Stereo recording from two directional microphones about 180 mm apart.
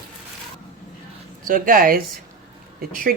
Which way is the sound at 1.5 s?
50° right (ahead or behind).